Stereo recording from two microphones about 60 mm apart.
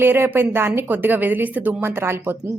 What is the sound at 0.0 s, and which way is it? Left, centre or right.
A woman's voice, right.